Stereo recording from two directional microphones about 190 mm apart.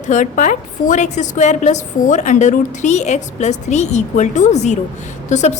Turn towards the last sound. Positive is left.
turn(degrees=40)  # may be behind; listen again after turning